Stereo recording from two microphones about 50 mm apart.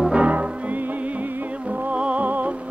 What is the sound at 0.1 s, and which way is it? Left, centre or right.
Music, right.